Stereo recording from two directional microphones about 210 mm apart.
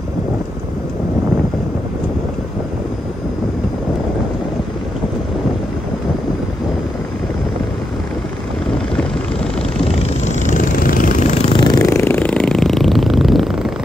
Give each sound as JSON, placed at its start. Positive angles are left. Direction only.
{"t": 8.9, "sound": "vehicle", "side_deg": 5}
{"t": 9.8, "sound": "vehicle", "side_deg": 35}
{"t": 11.5, "sound": "a sound", "side_deg": 20}